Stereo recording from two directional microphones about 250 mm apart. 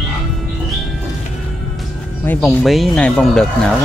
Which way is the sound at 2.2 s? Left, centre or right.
Centre.